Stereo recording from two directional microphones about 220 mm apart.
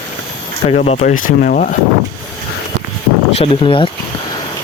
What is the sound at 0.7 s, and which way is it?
Speech, 35° left (ahead or behind).